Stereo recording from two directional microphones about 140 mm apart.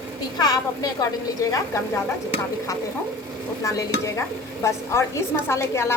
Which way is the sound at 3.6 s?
20° left (ahead or behind).